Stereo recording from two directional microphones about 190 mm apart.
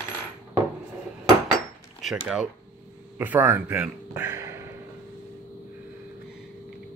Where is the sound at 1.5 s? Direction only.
Centre (ahead or behind).